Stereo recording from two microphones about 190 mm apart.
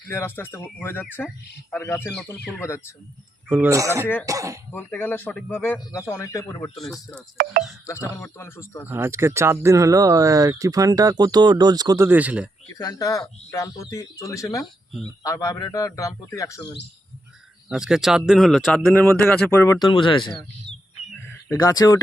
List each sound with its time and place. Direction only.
0.1 s speech: 10° left (ahead or behind)
3.5 s speech: 15° right (ahead or behind)
4.0 s speech: 10° left (ahead or behind)
4.3 s speech: 15° right (ahead or behind)
4.7 s speech: 10° left (ahead or behind)
8.1 s speech: 15° left (ahead or behind)
8.9 s speech: 15° right (ahead or behind)
12.7 s speech: 20° left (ahead or behind)
17.7 s speech: 5° right (ahead or behind); by 20.3 s 25° left (ahead or behind)
21.5 s speech: 20° left (ahead or behind)